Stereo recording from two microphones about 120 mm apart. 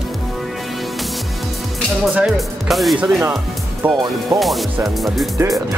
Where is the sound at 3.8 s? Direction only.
15° right (ahead or behind).